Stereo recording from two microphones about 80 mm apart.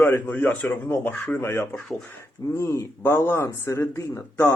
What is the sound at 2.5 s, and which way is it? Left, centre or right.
Speech, left.